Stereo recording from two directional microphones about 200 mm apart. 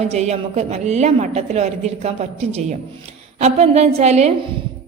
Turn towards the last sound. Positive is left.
turn(degrees=-35)  # may be behind; listen again after turning